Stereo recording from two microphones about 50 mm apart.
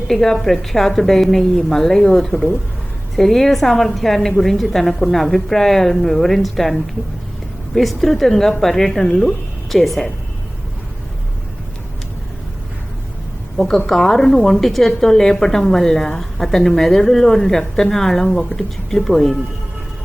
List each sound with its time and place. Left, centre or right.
0.1 s a woman's voice: centre
13.6 s a woman's voice: centre